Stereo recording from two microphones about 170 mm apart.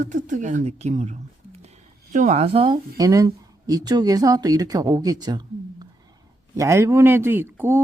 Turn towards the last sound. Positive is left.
turn(degrees=-15)  # may be behind; listen again after turning